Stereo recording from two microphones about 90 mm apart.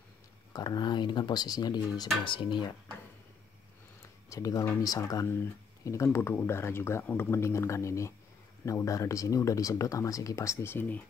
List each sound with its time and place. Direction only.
0.5 s speech: 45° left (ahead or behind)
2.2 s speech: 65° left (ahead or behind)
4.3 s speech: 45° left (ahead or behind)
5.2 s speech: 30° left (ahead or behind)